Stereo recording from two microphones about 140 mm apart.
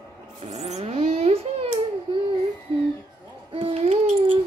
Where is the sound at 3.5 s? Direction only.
40° right (ahead or behind).